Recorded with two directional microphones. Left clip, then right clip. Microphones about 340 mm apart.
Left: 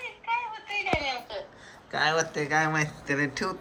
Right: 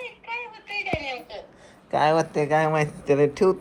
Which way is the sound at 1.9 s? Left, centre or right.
Centre.